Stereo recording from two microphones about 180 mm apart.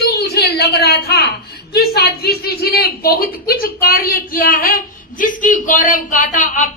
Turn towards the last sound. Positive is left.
turn(degrees=45)  # may be behind; listen again after turning